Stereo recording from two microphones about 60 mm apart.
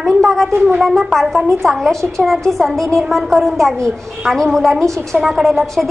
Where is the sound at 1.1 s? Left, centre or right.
Centre.